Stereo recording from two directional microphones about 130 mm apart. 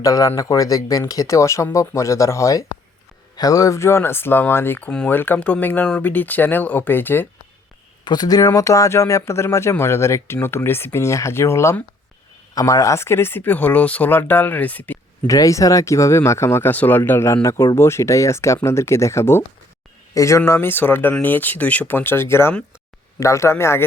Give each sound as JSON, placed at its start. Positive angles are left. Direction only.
{"t": 0.0, "sound": "speech", "side_deg": 25}
{"t": 8.0, "sound": "speech", "side_deg": 30}
{"t": 15.3, "sound": "speech", "side_deg": 25}